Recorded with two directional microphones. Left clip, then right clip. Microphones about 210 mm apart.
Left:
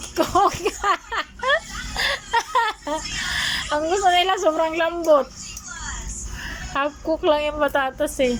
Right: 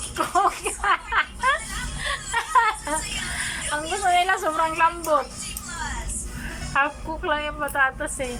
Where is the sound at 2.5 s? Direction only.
20° left (ahead or behind).